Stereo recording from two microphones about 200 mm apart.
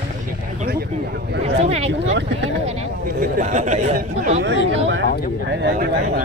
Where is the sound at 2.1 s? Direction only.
65° right (ahead or behind).